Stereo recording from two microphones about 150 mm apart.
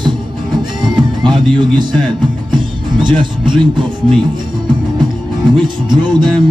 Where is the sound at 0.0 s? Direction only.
30° right (ahead or behind).